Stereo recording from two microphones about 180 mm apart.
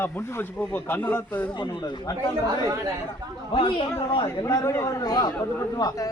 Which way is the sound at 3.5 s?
30° left (ahead or behind).